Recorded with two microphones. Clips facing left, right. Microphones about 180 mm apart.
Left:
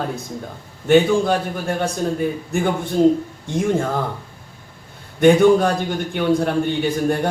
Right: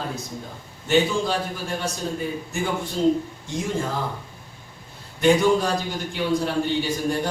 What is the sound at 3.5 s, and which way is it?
Speech, 55° left (ahead or behind).